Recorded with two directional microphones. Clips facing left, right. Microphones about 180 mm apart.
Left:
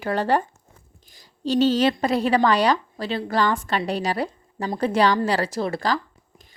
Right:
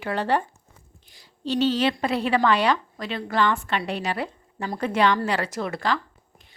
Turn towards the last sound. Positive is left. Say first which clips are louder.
# left 1 dB
turn(degrees=35)  # may be behind; listen again after turning